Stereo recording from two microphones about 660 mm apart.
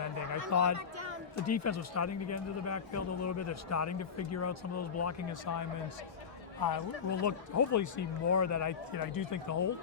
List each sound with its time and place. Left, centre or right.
0.5 s speech: left